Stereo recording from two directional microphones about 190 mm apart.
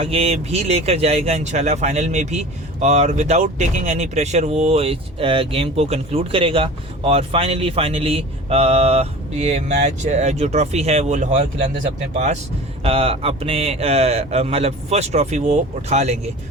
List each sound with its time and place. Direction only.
0.0 s speech: 30° right (ahead or behind)